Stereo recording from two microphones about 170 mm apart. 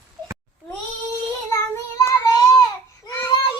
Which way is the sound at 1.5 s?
15° left (ahead or behind).